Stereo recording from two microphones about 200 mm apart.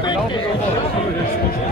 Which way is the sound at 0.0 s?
25° left (ahead or behind).